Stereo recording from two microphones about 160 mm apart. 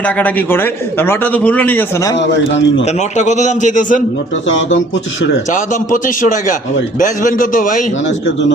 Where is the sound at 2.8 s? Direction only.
45° left (ahead or behind).